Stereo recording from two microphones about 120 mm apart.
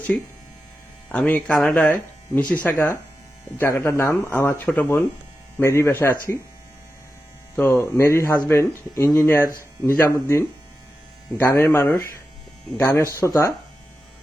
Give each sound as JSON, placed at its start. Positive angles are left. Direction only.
{"t": 1.1, "sound": "speech", "side_deg": 10}
{"t": 7.6, "sound": "speech", "side_deg": 20}